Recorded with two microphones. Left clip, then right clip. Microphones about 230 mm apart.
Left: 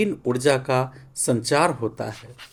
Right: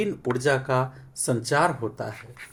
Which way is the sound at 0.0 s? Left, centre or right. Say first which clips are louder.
Left 3 dB; left.